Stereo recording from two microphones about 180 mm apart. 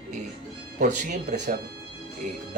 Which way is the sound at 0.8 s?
45° right (ahead or behind).